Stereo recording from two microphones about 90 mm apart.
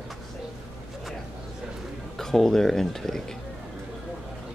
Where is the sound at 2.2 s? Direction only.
5° left (ahead or behind).